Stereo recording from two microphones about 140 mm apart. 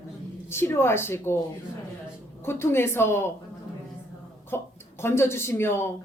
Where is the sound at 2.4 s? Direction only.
15° left (ahead or behind).